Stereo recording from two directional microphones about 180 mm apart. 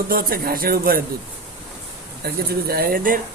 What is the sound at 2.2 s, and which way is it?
Speech, 60° right (ahead or behind).